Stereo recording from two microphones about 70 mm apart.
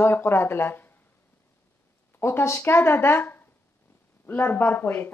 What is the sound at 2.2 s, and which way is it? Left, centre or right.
Speech, left.